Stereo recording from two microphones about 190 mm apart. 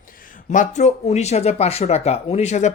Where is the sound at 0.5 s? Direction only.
40° left (ahead or behind).